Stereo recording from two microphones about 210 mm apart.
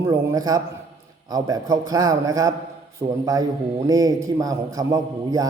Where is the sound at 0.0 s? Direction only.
15° right (ahead or behind).